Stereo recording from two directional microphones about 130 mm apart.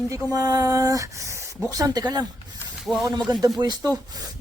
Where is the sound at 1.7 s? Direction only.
30° right (ahead or behind).